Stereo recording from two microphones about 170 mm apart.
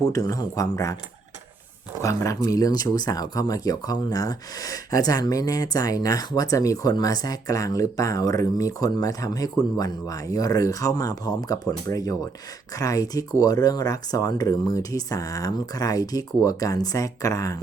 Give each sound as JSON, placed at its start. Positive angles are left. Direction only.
{"t": 0.0, "sound": "speech", "side_deg": 20}
{"t": 2.0, "sound": "speech", "side_deg": 20}